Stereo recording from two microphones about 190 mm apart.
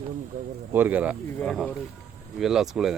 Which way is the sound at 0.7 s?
10° right (ahead or behind).